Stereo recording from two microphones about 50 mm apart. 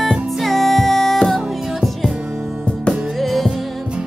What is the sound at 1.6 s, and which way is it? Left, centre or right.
Music, centre.